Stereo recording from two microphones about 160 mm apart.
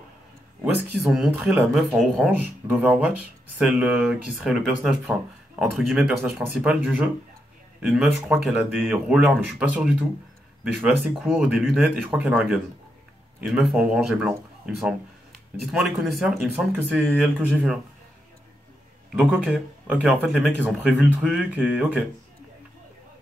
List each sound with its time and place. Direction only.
1.0 s speech: 5° right (ahead or behind)
15.3 s speech: centre (ahead or behind)
19.1 s speech: 5° right (ahead or behind)